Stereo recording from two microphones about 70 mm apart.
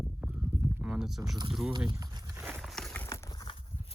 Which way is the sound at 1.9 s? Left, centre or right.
Right.